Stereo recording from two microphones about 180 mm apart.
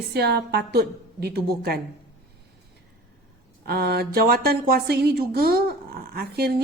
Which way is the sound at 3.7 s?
60° right (ahead or behind).